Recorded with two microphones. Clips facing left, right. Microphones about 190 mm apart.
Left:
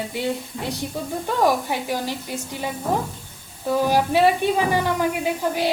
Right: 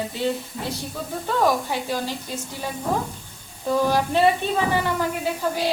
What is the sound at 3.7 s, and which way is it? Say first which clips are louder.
A woman's voice: left 1 dB; 10° left (ahead or behind).